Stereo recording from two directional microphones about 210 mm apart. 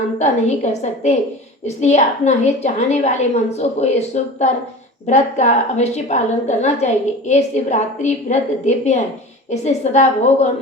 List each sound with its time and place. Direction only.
0.2 s a woman's voice: 30° left (ahead or behind)